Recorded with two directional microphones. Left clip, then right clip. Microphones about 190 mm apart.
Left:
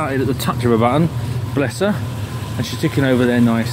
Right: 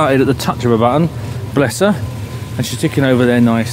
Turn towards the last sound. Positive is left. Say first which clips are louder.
# right 3 dB
turn(degrees=-20)  # may be behind; listen again after turning